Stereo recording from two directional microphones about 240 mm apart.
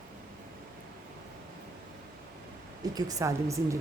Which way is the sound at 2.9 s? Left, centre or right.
Centre.